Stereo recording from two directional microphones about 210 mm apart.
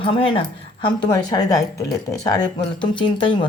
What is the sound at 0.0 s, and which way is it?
Speech, 25° left (ahead or behind).